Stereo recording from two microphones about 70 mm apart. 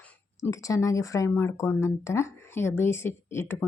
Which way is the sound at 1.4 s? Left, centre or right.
Left.